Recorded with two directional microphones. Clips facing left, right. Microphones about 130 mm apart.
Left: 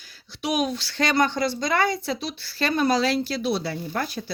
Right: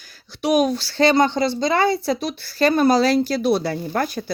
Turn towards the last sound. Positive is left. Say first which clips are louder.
# right 5 dB
turn(degrees=-50)  # may be behind; listen again after turning